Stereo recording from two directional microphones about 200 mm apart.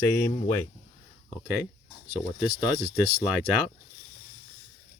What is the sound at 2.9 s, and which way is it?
Speech, centre (ahead or behind).